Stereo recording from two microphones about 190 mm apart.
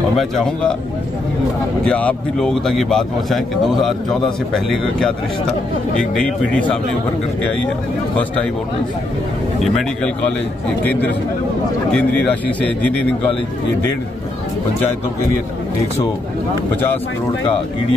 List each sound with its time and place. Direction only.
1.9 s speech: 5° left (ahead or behind)
10.8 s a man's voice: 10° left (ahead or behind)